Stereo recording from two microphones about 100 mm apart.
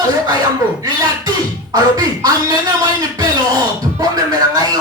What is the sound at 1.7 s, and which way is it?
Music, 40° right (ahead or behind).